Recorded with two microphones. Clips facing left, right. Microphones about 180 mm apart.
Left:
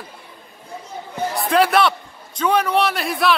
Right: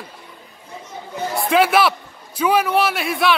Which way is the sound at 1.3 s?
Centre (ahead or behind).